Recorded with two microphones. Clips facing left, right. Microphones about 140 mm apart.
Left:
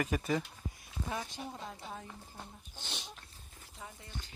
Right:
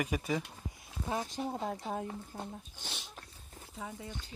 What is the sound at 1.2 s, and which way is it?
Speech, 45° right (ahead or behind).